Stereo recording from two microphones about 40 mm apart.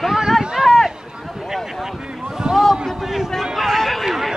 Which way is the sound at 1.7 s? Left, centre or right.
Centre.